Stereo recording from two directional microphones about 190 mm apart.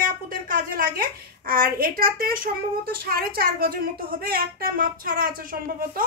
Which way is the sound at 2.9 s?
50° right (ahead or behind).